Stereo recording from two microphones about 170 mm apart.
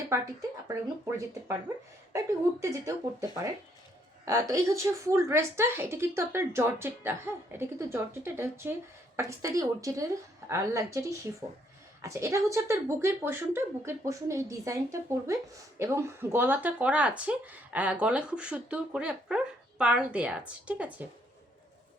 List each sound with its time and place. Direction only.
0.1 s a woman's voice: 15° right (ahead or behind)